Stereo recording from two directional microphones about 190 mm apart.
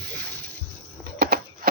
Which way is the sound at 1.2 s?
55° right (ahead or behind).